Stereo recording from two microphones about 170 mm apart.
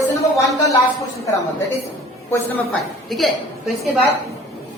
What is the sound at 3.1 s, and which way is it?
Speech, centre (ahead or behind).